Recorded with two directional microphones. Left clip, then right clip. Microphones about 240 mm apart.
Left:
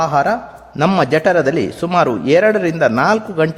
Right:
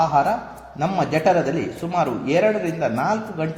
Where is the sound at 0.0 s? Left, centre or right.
Left.